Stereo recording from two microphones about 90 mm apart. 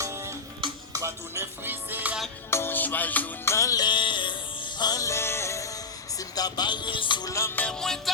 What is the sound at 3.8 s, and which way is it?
Music, 60° left (ahead or behind).